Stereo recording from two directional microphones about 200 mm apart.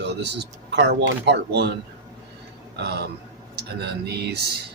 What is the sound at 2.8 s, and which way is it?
Speech, 55° right (ahead or behind).